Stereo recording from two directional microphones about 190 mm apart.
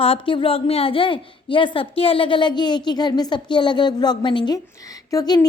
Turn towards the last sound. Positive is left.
turn(degrees=20)  # may be behind; listen again after turning